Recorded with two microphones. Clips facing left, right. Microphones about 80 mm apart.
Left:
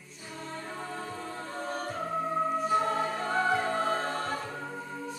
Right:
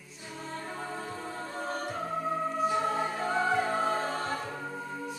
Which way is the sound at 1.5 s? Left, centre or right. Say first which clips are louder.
Even; centre.